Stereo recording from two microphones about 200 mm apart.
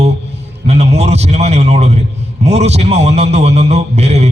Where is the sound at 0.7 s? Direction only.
30° right (ahead or behind).